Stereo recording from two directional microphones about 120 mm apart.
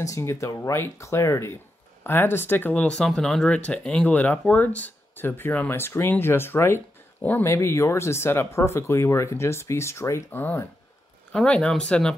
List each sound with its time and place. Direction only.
0.0 s speech: 25° left (ahead or behind); by 12.2 s 5° left (ahead or behind)